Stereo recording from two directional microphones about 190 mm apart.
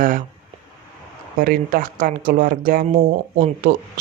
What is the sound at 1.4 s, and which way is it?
Speech, 45° right (ahead or behind).